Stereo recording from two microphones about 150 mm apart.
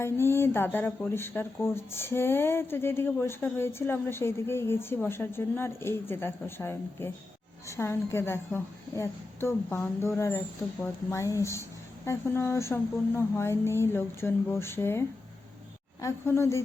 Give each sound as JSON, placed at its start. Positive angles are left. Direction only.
{"t": 0.0, "sound": "speech", "side_deg": 15}